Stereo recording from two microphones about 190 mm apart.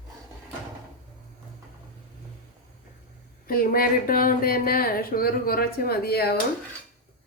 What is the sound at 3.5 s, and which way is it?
Speech, 50° left (ahead or behind).